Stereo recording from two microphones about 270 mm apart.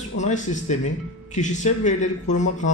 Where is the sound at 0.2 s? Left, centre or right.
Left.